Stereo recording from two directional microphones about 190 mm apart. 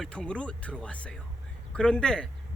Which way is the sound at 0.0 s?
5° left (ahead or behind).